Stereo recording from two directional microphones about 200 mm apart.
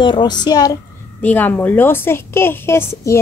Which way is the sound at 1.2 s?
10° left (ahead or behind).